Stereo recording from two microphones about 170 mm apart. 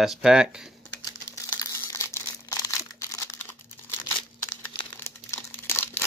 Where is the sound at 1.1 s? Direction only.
20° left (ahead or behind).